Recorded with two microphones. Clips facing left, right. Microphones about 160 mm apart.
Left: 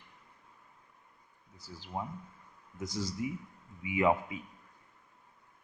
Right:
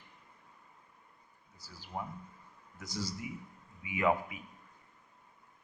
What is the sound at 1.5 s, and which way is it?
A man's voice, 25° left (ahead or behind).